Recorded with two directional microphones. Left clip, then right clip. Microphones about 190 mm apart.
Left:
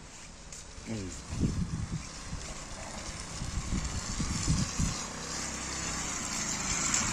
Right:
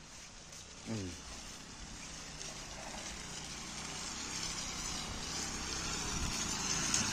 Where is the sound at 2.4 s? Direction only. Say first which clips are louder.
Left 2 dB; centre (ahead or behind).